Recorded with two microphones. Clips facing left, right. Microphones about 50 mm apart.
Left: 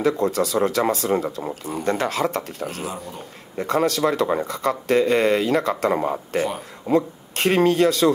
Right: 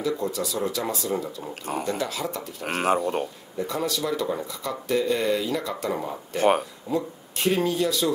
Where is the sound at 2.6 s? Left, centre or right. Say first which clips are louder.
Right 6 dB; right.